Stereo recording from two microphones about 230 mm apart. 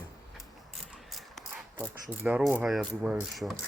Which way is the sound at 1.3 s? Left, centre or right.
Centre.